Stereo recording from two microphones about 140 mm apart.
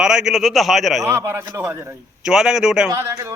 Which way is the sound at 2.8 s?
25° right (ahead or behind).